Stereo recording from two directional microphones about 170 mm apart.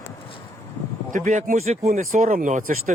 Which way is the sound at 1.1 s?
50° right (ahead or behind).